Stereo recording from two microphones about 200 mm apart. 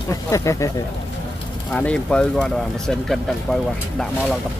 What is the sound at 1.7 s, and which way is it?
Speech, 5° left (ahead or behind).